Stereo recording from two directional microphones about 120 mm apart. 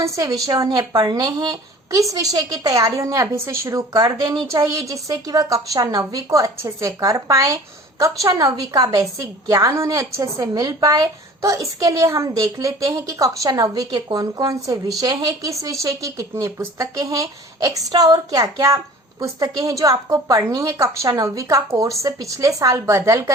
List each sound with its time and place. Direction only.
0.0 s speech: 30° right (ahead or behind)